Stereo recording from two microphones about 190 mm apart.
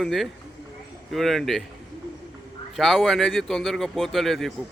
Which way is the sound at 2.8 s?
Centre (ahead or behind).